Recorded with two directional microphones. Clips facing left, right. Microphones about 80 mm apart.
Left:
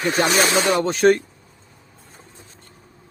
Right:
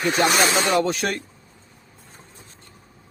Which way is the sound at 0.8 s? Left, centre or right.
Left.